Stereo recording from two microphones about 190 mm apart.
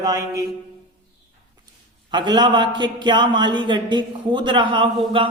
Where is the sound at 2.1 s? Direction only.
25° right (ahead or behind).